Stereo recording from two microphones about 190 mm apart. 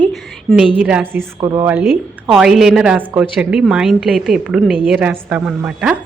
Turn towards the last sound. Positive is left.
turn(degrees=-5)  # may be behind; listen again after turning